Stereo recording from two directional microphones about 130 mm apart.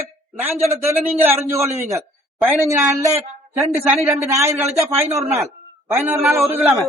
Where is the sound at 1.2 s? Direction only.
15° right (ahead or behind).